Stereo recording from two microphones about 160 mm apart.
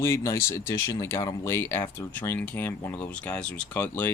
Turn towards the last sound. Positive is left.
turn(degrees=10)  # may be behind; listen again after turning